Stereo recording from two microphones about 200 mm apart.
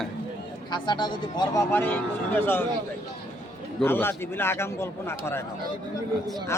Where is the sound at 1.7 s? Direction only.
10° left (ahead or behind).